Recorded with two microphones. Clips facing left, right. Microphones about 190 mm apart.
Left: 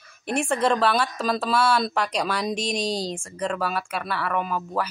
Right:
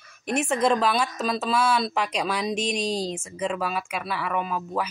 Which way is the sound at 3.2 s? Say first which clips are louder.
Left 1 dB; 5° right (ahead or behind).